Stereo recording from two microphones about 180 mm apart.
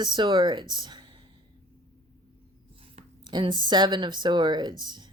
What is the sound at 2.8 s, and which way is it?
Speech, 25° right (ahead or behind).